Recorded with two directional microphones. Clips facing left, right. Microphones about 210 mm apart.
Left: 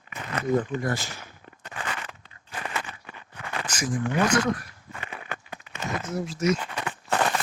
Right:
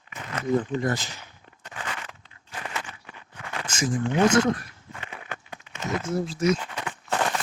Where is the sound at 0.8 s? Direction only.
20° right (ahead or behind).